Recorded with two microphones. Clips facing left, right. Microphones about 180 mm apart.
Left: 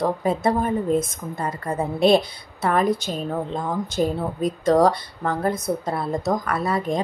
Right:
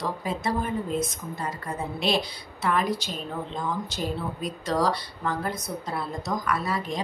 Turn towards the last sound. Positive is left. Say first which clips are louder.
# left 5 dB
turn(degrees=55)  # may be behind; listen again after turning